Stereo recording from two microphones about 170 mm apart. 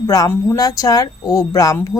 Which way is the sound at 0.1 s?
20° left (ahead or behind).